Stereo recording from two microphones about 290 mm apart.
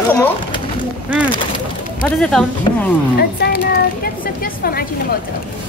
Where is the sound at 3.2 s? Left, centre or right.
Left.